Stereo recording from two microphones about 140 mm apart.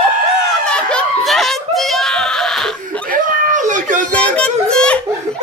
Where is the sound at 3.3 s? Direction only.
65° right (ahead or behind).